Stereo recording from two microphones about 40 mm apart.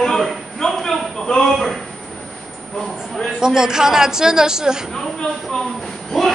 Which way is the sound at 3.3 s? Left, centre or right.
Centre.